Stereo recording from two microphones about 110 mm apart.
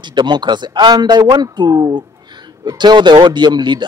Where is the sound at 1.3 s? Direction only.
40° right (ahead or behind).